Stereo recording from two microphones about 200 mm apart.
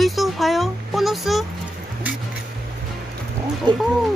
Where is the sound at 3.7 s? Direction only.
20° right (ahead or behind).